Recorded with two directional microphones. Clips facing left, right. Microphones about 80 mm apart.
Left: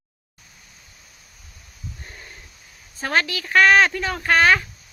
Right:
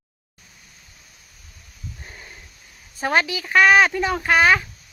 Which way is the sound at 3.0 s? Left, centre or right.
Centre.